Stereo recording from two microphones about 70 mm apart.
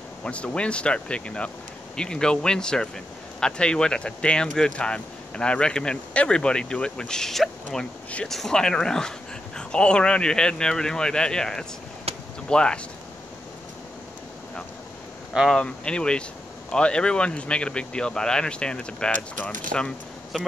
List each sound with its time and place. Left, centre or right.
0.2 s speech: centre
15.5 s speech: centre
20.3 s speech: centre